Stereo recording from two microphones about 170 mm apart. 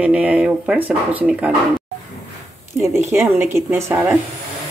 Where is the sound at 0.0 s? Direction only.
5° right (ahead or behind).